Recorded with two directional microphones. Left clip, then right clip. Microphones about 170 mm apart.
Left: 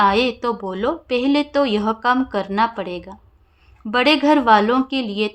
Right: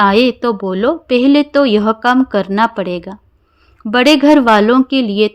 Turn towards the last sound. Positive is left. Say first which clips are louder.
# right 9 dB
turn(degrees=-40)  # may be behind; listen again after turning